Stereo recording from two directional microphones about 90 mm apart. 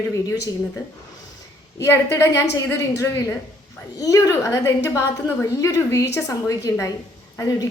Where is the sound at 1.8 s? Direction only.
30° left (ahead or behind).